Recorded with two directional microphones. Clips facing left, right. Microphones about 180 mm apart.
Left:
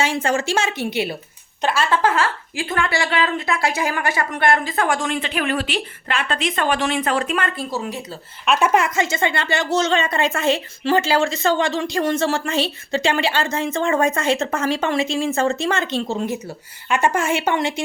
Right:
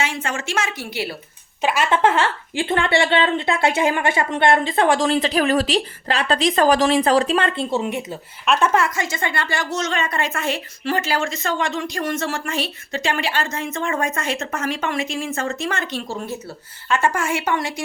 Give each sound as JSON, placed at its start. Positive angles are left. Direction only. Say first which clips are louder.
{"t": 0.0, "sound": "a woman's voice", "louder": "left 5 dB", "side_deg": 35}
{"t": 1.6, "sound": "a woman's voice", "louder": "right 1 dB", "side_deg": -20}
{"t": 8.4, "sound": "speech", "louder": "left 1 dB", "side_deg": 10}